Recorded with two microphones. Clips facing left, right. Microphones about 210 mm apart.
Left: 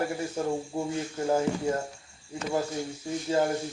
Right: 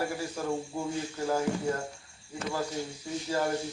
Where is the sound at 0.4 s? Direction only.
20° left (ahead or behind).